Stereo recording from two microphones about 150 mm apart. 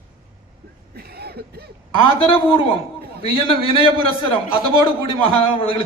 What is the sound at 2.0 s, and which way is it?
A man's voice, 35° left (ahead or behind).